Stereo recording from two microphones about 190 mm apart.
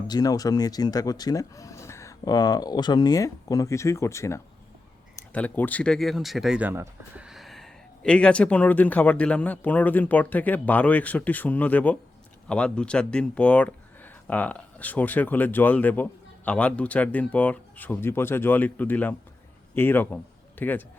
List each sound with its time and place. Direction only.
0.1 s speech: 20° left (ahead or behind)